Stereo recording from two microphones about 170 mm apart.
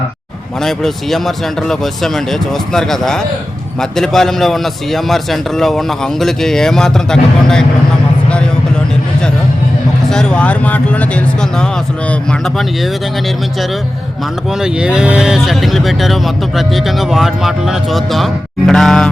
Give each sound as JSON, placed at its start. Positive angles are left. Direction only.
{"t": 0.6, "sound": "a man's voice", "side_deg": 0}
{"t": 10.1, "sound": "speech", "side_deg": 5}
{"t": 14.6, "sound": "a man's voice", "side_deg": -5}